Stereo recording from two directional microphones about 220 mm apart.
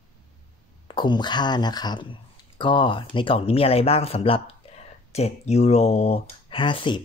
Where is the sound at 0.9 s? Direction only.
20° left (ahead or behind).